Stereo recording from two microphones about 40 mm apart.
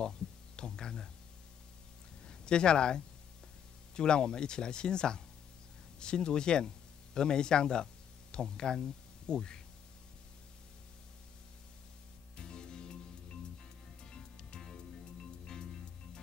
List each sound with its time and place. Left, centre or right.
0.6 s a sound: centre
2.2 s speech: left
12.4 s music: centre